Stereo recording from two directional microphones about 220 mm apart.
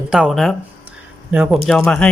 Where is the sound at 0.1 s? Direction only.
Centre (ahead or behind).